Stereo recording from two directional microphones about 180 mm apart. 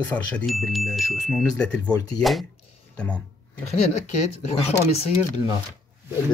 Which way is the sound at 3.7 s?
35° left (ahead or behind).